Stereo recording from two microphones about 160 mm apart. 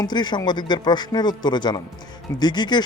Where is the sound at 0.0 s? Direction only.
25° left (ahead or behind).